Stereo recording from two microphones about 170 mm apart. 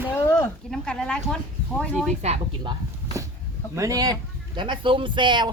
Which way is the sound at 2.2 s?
35° right (ahead or behind).